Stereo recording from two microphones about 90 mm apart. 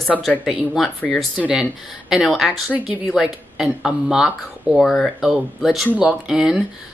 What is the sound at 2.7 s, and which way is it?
Speech, 15° right (ahead or behind).